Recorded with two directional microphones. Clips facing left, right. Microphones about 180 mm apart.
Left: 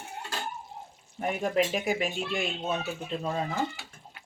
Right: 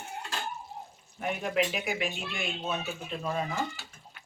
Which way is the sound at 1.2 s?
45° left (ahead or behind).